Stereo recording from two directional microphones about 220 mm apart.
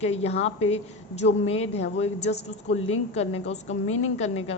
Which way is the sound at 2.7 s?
25° left (ahead or behind).